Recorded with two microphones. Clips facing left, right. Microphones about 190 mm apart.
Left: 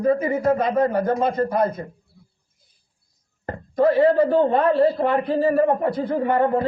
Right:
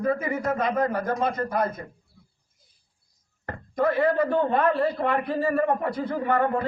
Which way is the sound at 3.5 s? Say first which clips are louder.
Left 6 dB; 30° left (ahead or behind).